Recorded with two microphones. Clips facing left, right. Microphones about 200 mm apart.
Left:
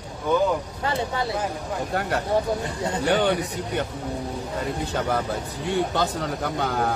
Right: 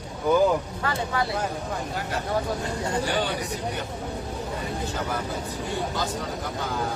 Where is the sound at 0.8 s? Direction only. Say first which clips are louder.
Left 1 dB; 25° left (ahead or behind).